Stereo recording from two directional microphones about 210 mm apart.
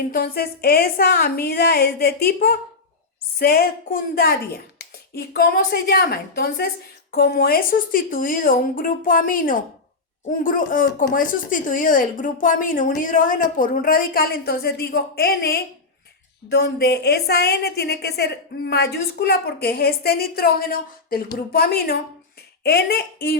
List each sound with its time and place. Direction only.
0.1 s a woman's voice: 45° left (ahead or behind)